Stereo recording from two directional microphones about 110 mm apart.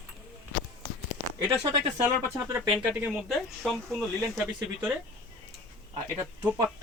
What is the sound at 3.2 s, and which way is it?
Speech, centre (ahead or behind).